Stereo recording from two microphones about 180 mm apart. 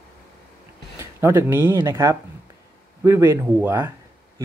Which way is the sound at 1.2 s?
10° right (ahead or behind).